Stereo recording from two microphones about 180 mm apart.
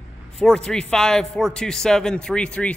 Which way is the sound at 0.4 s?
5° left (ahead or behind).